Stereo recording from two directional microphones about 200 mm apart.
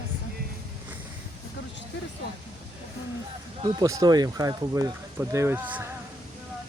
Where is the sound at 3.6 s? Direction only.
20° right (ahead or behind).